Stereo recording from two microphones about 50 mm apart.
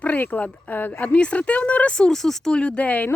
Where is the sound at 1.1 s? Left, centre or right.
Left.